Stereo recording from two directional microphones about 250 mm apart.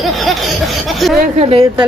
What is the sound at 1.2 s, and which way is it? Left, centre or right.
Speech, right.